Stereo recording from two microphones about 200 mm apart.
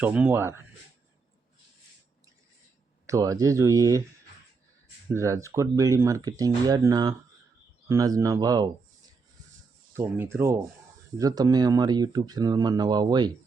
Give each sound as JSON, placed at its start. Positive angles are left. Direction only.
{"t": 0.0, "sound": "speech", "side_deg": -5}
{"t": 3.1, "sound": "speech", "side_deg": -15}
{"t": 5.1, "sound": "speech", "side_deg": -15}
{"t": 9.9, "sound": "speech", "side_deg": -10}